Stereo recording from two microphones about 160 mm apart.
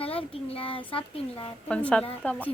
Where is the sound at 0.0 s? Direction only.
35° left (ahead or behind).